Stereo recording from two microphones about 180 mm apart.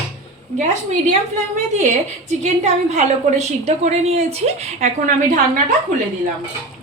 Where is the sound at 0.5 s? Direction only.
40° right (ahead or behind).